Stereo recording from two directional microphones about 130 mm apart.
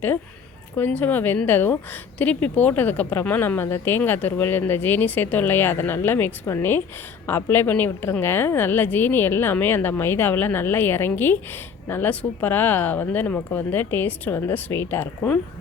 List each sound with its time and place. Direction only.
0.8 s speech: 10° left (ahead or behind)